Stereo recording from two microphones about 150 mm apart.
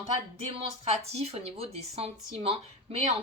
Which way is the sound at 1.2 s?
45° right (ahead or behind).